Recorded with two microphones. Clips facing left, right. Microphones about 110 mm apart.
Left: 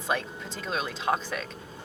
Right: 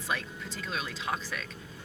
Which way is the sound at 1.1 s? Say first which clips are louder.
Left 7 dB; 35° left (ahead or behind).